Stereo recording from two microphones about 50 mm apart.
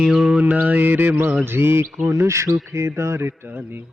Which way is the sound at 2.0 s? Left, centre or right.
Right.